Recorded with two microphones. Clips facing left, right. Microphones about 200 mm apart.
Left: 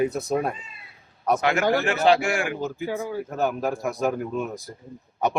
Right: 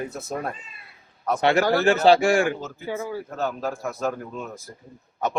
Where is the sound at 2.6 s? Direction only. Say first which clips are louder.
Left 2 dB; 15° left (ahead or behind).